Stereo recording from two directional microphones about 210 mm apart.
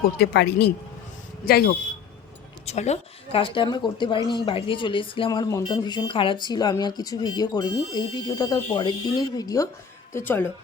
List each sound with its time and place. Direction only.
0.2 s speech: 50° left (ahead or behind)
2.6 s speech: 30° left (ahead or behind); by 10.5 s 10° left (ahead or behind)